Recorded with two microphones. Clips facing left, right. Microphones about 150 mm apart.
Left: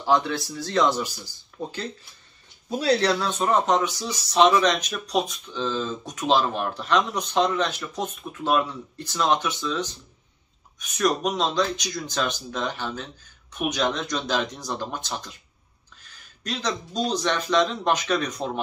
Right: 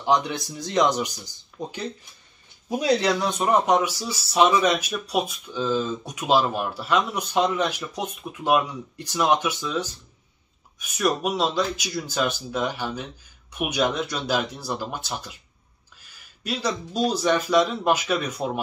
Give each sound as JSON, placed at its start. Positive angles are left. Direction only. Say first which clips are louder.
{"t": 0.0, "sound": "speech", "louder": "even", "side_deg": -15}